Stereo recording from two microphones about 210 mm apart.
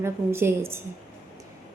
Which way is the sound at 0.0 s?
10° right (ahead or behind).